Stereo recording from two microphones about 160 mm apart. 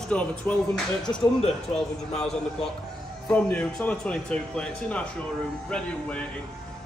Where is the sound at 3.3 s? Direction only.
10° left (ahead or behind).